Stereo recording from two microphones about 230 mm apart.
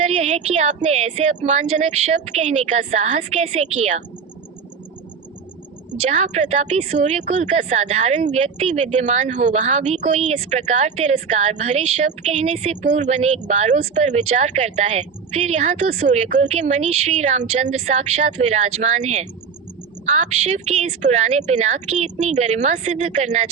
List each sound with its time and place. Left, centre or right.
0.0 s a woman's voice: right
6.0 s a woman's voice: right